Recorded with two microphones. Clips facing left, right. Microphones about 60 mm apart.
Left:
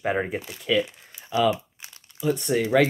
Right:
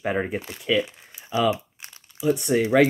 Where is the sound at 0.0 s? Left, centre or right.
Centre.